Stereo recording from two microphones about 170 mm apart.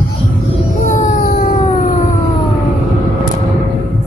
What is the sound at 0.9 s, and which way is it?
Music, 50° left (ahead or behind).